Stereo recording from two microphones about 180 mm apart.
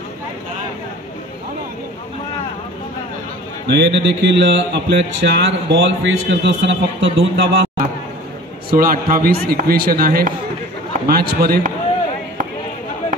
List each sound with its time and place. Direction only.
3.6 s speech: 75° right (ahead or behind)
8.6 s a man's voice: 55° right (ahead or behind)